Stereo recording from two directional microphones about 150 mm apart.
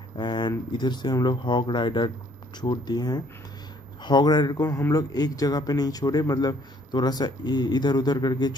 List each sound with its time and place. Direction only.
0.2 s a man's voice: 30° left (ahead or behind)